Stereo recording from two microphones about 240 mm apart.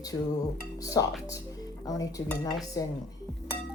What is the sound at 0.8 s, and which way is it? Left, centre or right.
Speech, centre.